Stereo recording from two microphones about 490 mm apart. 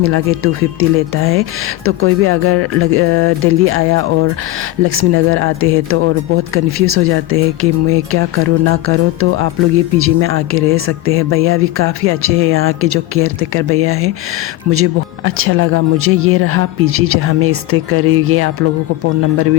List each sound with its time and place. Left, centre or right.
0.0 s speech: right